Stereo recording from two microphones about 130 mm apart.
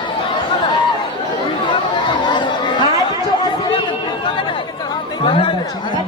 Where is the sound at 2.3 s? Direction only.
35° left (ahead or behind).